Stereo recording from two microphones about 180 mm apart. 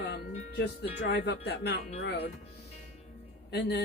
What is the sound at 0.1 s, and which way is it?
Speech, 70° left (ahead or behind).